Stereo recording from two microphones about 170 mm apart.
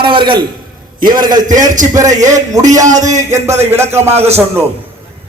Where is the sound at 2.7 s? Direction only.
20° right (ahead or behind).